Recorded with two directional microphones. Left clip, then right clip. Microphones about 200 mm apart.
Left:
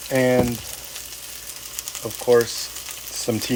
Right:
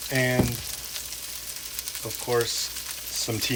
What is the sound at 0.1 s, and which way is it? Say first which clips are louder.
Frying: left 6 dB; 30° left (ahead or behind).